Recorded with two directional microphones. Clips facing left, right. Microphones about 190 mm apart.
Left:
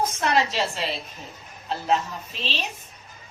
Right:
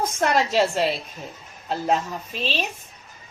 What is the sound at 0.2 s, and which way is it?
Speech, 50° right (ahead or behind).